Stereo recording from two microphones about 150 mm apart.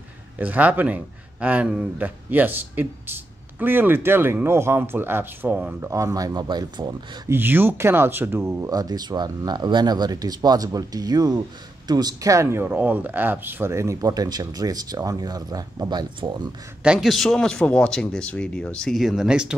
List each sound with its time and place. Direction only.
0.4 s speech: 10° right (ahead or behind); by 7.0 s 30° right (ahead or behind)
7.2 s speech: 15° right (ahead or behind); by 16.4 s 30° right (ahead or behind)
16.8 s speech: 5° right (ahead or behind)